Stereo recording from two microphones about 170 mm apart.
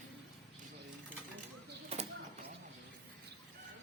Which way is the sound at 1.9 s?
35° right (ahead or behind).